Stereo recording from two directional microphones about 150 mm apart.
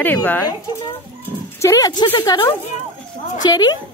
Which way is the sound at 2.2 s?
30° left (ahead or behind).